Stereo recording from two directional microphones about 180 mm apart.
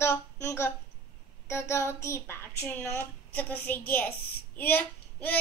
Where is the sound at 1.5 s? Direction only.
15° left (ahead or behind).